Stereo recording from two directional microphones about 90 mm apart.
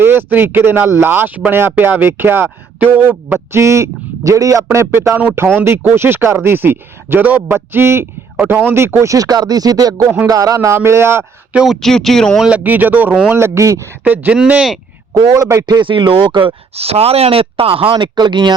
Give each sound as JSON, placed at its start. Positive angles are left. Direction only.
{"t": 0.0, "sound": "speech", "side_deg": -25}
{"t": 11.5, "sound": "speech", "side_deg": 0}
{"t": 12.4, "sound": "speech", "side_deg": -15}
{"t": 13.3, "sound": "speech", "side_deg": -30}
{"t": 14.0, "sound": "speech", "side_deg": -15}
{"t": 15.1, "sound": "speech", "side_deg": -45}
{"t": 15.6, "sound": "speech", "side_deg": -55}